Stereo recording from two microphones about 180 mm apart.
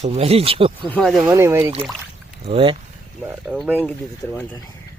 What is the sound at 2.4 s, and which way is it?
Speech, 30° right (ahead or behind).